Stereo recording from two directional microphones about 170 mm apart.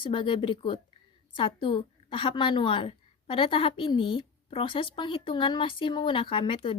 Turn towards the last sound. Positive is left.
turn(degrees=30)  # may be behind; listen again after turning